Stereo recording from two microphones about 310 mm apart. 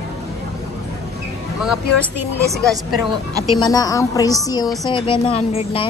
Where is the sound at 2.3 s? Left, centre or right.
Centre.